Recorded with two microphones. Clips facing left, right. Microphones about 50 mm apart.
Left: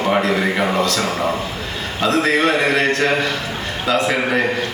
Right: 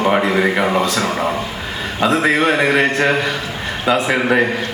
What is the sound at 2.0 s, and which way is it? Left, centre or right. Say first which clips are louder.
A man's voice: right 2 dB; centre.